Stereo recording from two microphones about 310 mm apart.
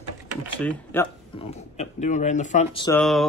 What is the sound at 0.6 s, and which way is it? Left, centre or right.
Speech, centre.